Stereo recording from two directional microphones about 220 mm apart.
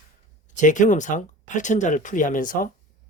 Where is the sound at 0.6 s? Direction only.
35° left (ahead or behind).